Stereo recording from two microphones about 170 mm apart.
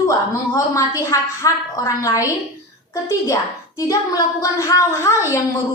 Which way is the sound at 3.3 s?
20° left (ahead or behind).